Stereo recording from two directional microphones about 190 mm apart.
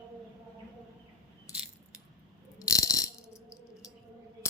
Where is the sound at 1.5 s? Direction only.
15° left (ahead or behind).